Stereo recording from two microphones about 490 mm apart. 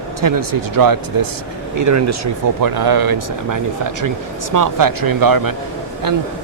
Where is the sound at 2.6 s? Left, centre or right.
Right.